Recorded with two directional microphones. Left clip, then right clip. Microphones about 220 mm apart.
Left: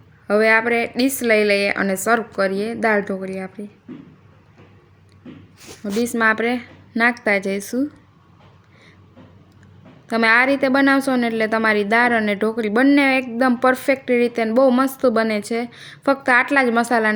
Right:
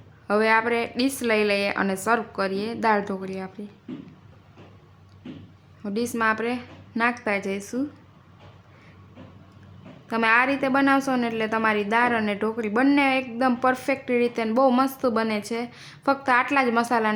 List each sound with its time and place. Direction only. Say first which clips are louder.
0.3 s a woman's voice: left 5 dB; 20° left (ahead or behind)
5.8 s a woman's voice: left 6 dB; 20° left (ahead or behind)
10.1 s a woman's voice: left 5 dB; 20° left (ahead or behind)